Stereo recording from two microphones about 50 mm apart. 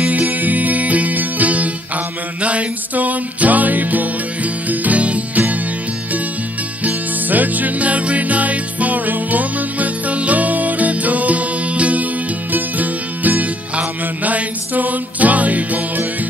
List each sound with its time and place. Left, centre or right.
0.0 s music: right
6.8 s music: right